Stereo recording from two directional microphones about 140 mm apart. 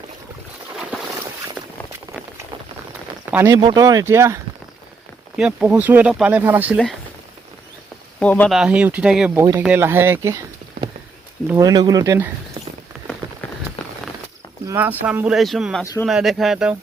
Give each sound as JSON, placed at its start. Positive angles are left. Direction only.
{"t": 3.5, "sound": "speech", "side_deg": -30}
{"t": 5.4, "sound": "speech", "side_deg": -5}
{"t": 8.2, "sound": "speech", "side_deg": 10}
{"t": 8.4, "sound": "speech", "side_deg": -5}
{"t": 9.3, "sound": "speech", "side_deg": -15}
{"t": 11.5, "sound": "speech", "side_deg": -25}
{"t": 14.8, "sound": "speech", "side_deg": -10}
{"t": 15.8, "sound": "speech", "side_deg": 20}
{"t": 16.0, "sound": "speech", "side_deg": 0}